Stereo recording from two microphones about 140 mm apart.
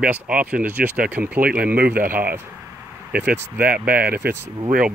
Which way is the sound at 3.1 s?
10° right (ahead or behind).